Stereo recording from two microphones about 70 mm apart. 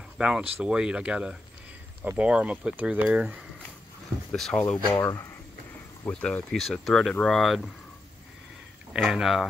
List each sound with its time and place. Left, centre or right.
0.2 s speech: centre
4.3 s speech: centre
5.0 s speech: left
6.0 s speech: centre
6.6 s speech: centre
8.9 s speech: centre